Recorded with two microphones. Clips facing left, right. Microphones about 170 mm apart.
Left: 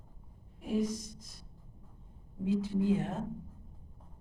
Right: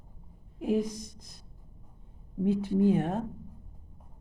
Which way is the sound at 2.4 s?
60° right (ahead or behind).